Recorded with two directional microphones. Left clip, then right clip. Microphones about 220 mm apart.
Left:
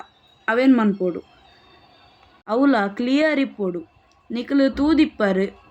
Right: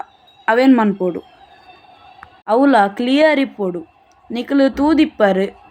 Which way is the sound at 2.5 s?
5° left (ahead or behind).